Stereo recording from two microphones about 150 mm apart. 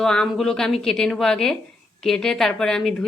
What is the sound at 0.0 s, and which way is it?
Speech, 5° left (ahead or behind).